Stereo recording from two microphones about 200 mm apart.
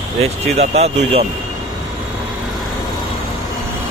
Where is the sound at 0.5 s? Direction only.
30° right (ahead or behind).